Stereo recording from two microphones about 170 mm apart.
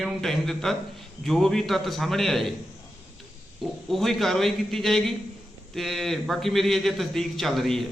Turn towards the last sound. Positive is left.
turn(degrees=0)  # may be behind; listen again after turning